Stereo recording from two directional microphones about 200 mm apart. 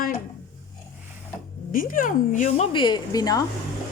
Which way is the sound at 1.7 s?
45° left (ahead or behind).